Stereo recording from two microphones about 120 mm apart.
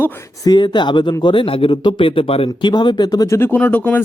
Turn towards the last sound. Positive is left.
turn(degrees=15)  # may be behind; listen again after turning